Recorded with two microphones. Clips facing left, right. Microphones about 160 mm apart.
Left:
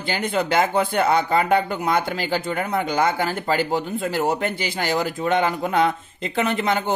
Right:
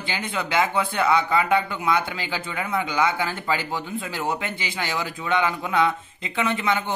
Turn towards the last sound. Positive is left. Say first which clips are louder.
# left 2 dB
turn(degrees=40)  # may be behind; listen again after turning